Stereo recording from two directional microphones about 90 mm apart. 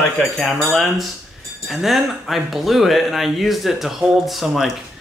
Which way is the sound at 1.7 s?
Centre (ahead or behind).